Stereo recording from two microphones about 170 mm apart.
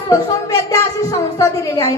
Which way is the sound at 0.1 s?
20° left (ahead or behind).